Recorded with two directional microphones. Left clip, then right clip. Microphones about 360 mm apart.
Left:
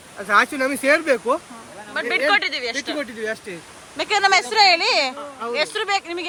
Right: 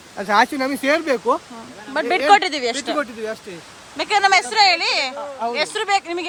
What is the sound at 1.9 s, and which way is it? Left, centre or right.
Speech, centre.